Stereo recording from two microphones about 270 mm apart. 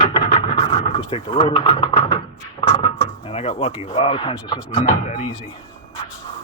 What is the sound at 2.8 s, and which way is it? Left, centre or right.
Drawer open or close, left.